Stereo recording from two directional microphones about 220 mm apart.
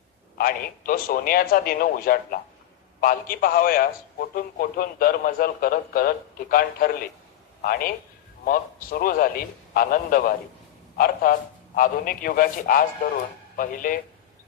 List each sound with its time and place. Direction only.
0.3 s a man's voice: 40° left (ahead or behind)